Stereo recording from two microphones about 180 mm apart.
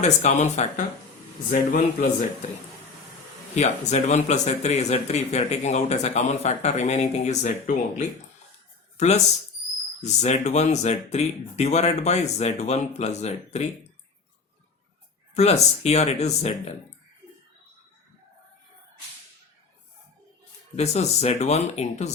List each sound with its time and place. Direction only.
0.0 s speech: 40° left (ahead or behind)
3.5 s speech: 40° left (ahead or behind)
15.4 s speech: 35° left (ahead or behind)
20.7 s speech: 35° left (ahead or behind)